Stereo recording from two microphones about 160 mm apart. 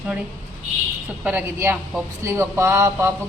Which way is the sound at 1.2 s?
10° right (ahead or behind).